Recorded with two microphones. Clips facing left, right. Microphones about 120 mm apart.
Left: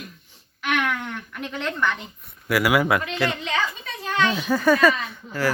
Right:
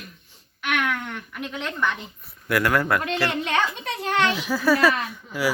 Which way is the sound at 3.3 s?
60° right (ahead or behind).